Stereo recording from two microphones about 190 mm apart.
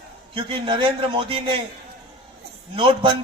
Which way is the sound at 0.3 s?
25° right (ahead or behind).